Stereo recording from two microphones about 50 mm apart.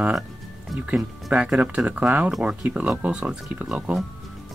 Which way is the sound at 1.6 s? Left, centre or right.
Right.